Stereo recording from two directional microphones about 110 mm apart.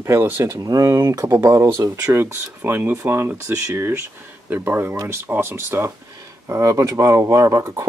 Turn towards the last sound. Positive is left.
turn(degrees=-30)  # may be behind; listen again after turning